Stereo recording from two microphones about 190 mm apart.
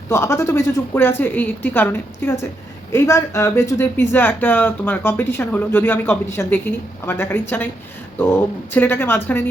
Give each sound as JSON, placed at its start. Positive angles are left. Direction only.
{"t": 0.1, "sound": "speech", "side_deg": 15}